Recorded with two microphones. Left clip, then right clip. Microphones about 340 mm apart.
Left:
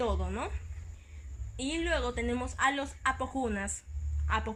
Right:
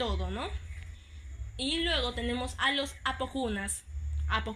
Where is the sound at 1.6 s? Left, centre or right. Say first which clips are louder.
Right 3 dB; centre.